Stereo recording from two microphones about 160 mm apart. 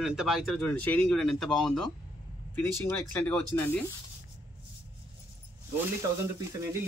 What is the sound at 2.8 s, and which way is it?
Speech, 10° left (ahead or behind).